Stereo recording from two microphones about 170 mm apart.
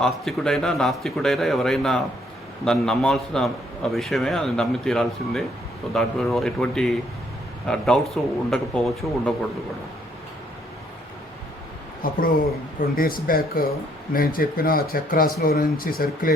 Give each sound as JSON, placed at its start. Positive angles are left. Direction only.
{"t": 0.0, "sound": "a man's voice", "side_deg": 0}
{"t": 12.0, "sound": "speech", "side_deg": 55}